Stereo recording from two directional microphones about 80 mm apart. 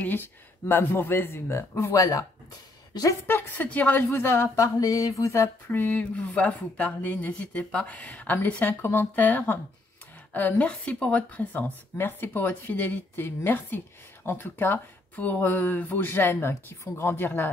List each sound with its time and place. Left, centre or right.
0.0 s speech: left
2.9 s a woman's voice: left
3.3 s a woman's voice: left
4.1 s speech: left
5.7 s a woman's voice: left